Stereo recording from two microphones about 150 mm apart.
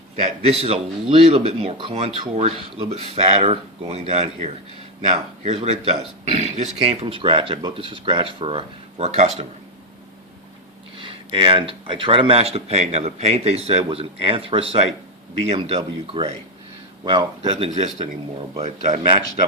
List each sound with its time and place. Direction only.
0.4 s speech: 45° right (ahead or behind)
10.9 s speech: 35° right (ahead or behind)